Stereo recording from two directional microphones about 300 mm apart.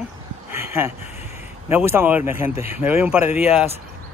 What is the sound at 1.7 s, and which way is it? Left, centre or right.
Speech, centre.